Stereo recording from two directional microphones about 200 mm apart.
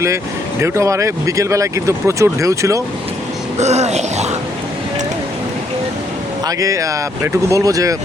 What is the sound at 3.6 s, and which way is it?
Speech, 35° right (ahead or behind).